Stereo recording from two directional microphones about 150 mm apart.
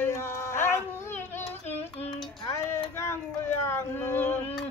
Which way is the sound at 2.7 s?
15° left (ahead or behind).